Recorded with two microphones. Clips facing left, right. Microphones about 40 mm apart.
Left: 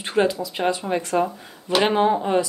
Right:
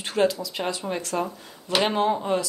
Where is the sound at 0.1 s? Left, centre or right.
Centre.